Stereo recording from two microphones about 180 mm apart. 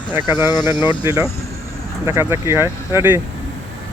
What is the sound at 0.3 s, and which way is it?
Speech, 25° left (ahead or behind).